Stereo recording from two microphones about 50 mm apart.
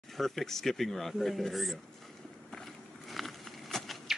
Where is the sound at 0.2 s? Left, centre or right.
Centre.